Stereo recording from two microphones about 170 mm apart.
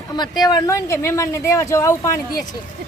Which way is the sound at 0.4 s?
20° left (ahead or behind).